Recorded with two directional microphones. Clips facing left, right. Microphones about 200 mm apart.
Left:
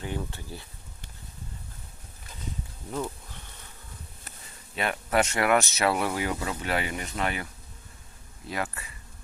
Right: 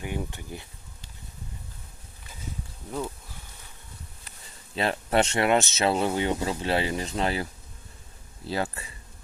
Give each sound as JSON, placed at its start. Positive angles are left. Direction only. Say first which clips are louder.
{"t": 0.0, "sound": "speech", "louder": "right 1 dB", "side_deg": -15}
{"t": 4.7, "sound": "speech", "louder": "right 2 dB", "side_deg": -30}
{"t": 8.4, "sound": "speech", "louder": "right 3 dB", "side_deg": -30}